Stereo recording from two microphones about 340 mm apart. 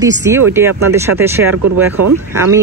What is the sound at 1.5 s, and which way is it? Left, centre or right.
Speech, right.